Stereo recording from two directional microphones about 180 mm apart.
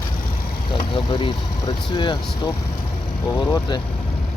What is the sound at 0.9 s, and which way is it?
Speech, 25° left (ahead or behind).